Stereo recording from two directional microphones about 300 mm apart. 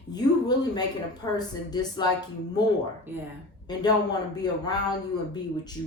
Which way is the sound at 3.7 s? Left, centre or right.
Centre.